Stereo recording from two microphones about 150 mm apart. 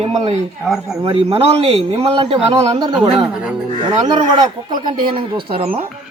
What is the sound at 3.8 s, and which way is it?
Speech, 30° right (ahead or behind).